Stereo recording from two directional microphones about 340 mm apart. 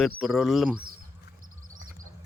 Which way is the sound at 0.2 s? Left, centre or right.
Centre.